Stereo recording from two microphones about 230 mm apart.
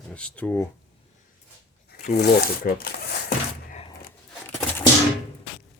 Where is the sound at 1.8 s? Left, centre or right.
Left.